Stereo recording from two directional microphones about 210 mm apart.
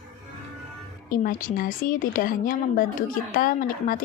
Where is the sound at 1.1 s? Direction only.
40° left (ahead or behind).